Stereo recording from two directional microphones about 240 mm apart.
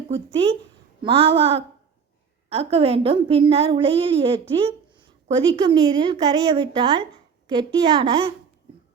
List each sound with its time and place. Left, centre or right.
0.3 s a woman's voice: right